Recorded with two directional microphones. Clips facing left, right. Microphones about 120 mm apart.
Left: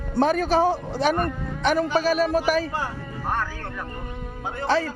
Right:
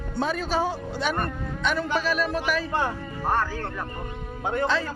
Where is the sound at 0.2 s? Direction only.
50° left (ahead or behind).